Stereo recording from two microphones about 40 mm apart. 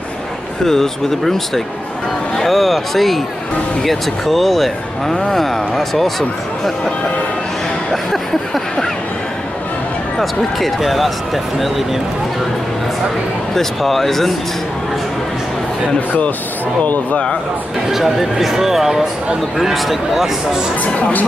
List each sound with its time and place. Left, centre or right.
0.7 s speech: centre
10.1 s speech: centre
13.6 s speech: centre
16.8 s speech: left
17.9 s speech: centre
20.8 s speech: left